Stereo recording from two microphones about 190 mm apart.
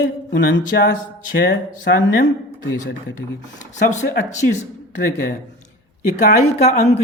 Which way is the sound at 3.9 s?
40° left (ahead or behind).